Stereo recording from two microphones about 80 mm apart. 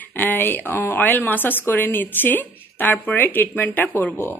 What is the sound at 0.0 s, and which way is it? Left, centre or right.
Speech, left.